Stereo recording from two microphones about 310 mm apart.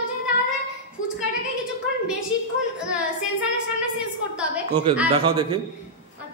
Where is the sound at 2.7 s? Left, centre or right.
Centre.